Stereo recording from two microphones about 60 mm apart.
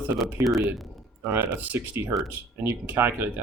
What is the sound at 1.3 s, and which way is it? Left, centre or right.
Speech, right.